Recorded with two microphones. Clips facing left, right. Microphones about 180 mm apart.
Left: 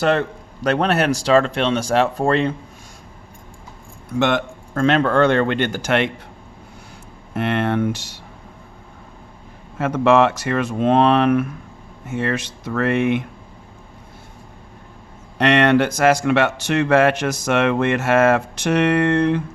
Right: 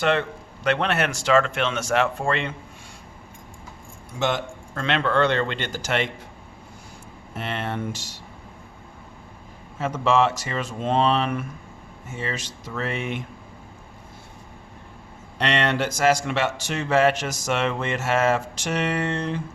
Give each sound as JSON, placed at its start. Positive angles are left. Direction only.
{"t": 0.0, "sound": "a man's voice", "side_deg": 40}
{"t": 4.2, "sound": "speech", "side_deg": 60}
{"t": 4.8, "sound": "speech", "side_deg": 45}
{"t": 7.3, "sound": "speech", "side_deg": 60}
{"t": 9.7, "sound": "speech", "side_deg": 60}
{"t": 15.4, "sound": "speech", "side_deg": 55}